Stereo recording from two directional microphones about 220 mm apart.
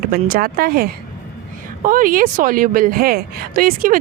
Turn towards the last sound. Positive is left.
turn(degrees=-40)  # may be behind; listen again after turning